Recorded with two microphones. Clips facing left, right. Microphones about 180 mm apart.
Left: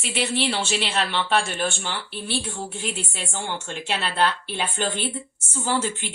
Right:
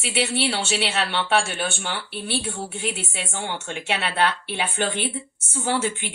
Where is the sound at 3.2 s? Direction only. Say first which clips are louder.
Right 1 dB; 60° right (ahead or behind).